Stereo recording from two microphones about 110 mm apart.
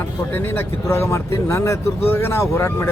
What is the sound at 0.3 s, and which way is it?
Speech, 20° left (ahead or behind).